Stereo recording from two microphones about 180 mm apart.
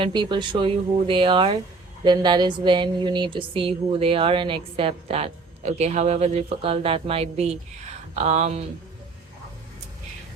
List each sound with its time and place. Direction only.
0.0 s a woman's voice: 25° right (ahead or behind)